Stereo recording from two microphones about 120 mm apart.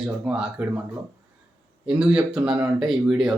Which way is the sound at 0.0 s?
5° right (ahead or behind).